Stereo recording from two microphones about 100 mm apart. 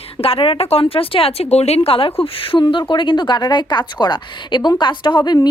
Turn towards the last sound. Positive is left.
turn(degrees=45)  # may be behind; listen again after turning